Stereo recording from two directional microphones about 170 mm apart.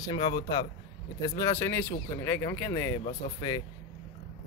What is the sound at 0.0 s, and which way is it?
Speech, 25° left (ahead or behind).